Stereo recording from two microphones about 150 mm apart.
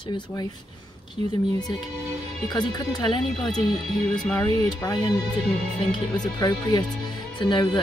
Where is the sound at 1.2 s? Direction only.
45° right (ahead or behind).